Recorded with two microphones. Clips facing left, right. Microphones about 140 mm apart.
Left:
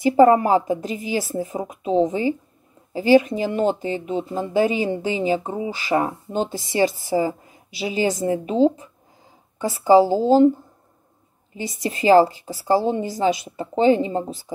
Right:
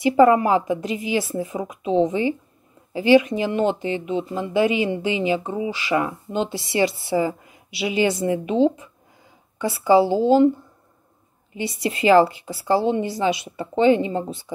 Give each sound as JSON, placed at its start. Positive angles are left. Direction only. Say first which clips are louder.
{"t": 0.0, "sound": "speech", "louder": "left 1 dB", "side_deg": 40}
{"t": 11.5, "sound": "speech", "louder": "right 2 dB", "side_deg": 40}